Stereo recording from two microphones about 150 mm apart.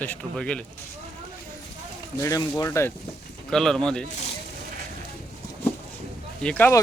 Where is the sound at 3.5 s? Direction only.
5° left (ahead or behind).